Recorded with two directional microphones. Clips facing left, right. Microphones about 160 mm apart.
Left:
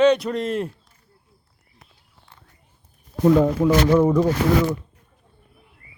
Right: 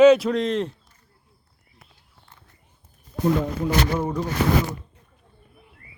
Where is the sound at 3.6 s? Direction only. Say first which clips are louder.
Left 7 dB; 90° left.